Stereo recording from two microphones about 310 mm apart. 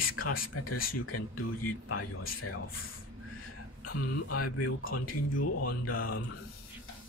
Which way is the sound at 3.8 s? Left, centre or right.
Left.